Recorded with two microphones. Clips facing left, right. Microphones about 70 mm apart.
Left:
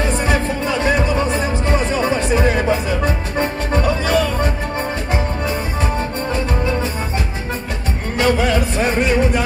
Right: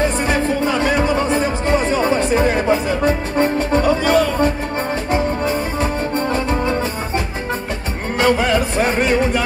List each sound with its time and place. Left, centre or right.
0.3 s music: right
8.2 s music: right